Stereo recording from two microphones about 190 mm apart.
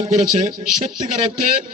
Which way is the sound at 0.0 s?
35° right (ahead or behind).